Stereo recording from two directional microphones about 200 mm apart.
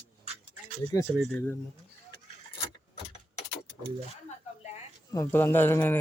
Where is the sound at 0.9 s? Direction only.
20° left (ahead or behind).